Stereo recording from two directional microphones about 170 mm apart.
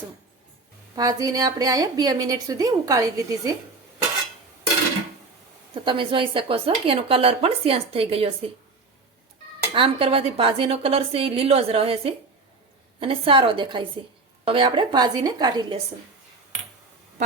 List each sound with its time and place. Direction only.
0.9 s a woman's voice: 20° right (ahead or behind)
5.7 s speech: 30° right (ahead or behind)
9.7 s a woman's voice: 30° right (ahead or behind)